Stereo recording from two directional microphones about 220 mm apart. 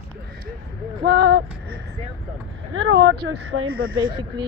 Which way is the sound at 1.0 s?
45° right (ahead or behind).